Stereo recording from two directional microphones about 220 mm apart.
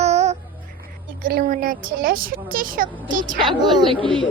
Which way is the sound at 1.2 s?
40° right (ahead or behind).